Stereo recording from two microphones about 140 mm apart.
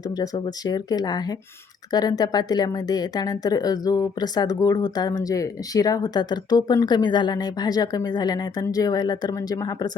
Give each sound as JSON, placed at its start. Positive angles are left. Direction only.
{"t": 0.2, "sound": "a woman's voice", "side_deg": 30}